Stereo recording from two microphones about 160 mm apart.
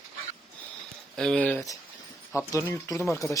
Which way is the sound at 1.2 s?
5° left (ahead or behind).